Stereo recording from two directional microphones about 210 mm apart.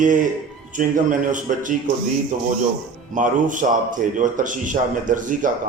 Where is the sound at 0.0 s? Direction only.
35° right (ahead or behind).